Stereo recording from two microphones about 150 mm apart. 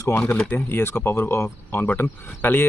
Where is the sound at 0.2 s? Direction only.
10° left (ahead or behind).